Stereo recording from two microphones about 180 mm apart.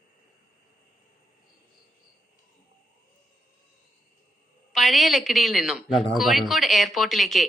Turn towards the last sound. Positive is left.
turn(degrees=0)  # may be behind; listen again after turning